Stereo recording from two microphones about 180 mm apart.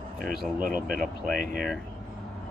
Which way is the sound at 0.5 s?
50° right (ahead or behind).